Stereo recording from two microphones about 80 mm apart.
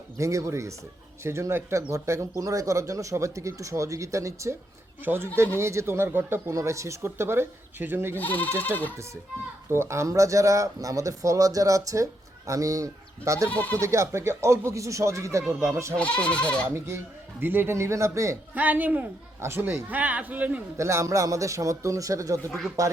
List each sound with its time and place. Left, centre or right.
0.2 s speech: right
5.0 s a man's voice: right
6.5 s speech: right
8.2 s speech: left
9.6 s speech: right
13.5 s speech: centre
13.7 s speech: right
16.0 s speech: centre
16.7 s speech: right
18.5 s a man's voice: right
19.4 s a man's voice: right
20.7 s speech: right